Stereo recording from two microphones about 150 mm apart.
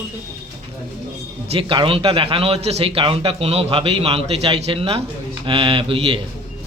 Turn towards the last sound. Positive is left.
turn(degrees=-35)  # may be behind; listen again after turning